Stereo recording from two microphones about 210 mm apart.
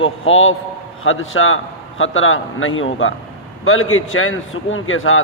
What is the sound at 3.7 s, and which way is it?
A man's voice, 80° left.